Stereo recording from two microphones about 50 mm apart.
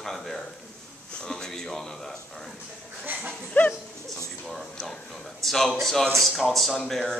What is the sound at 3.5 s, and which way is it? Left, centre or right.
Dog, left.